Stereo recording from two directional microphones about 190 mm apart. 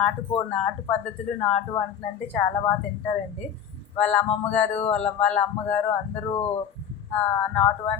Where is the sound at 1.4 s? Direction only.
5° left (ahead or behind).